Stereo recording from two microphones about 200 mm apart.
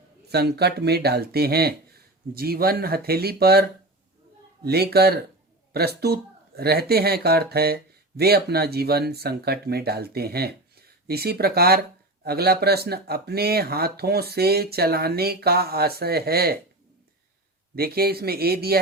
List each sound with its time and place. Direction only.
0.3 s speech: 55° right (ahead or behind)
17.7 s speech: 50° right (ahead or behind)